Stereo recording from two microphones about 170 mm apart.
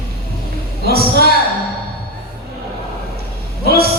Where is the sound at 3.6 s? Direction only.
65° right (ahead or behind).